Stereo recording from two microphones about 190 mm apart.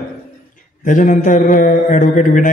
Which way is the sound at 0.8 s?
45° left (ahead or behind).